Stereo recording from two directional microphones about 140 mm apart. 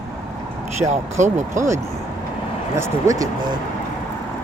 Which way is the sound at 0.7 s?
55° right (ahead or behind).